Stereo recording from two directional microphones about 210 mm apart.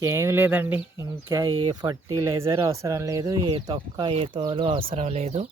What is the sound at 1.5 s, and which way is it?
Speech, 20° right (ahead or behind).